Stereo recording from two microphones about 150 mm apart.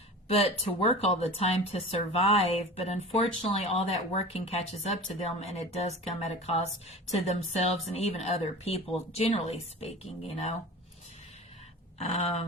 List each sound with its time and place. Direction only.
0.3 s speech: 40° left (ahead or behind)
11.9 s speech: 45° left (ahead or behind)